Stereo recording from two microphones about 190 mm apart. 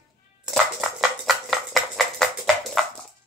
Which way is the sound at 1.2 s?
Centre (ahead or behind).